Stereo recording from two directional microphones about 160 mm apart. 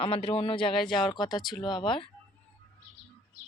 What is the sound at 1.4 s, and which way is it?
Speech, centre (ahead or behind).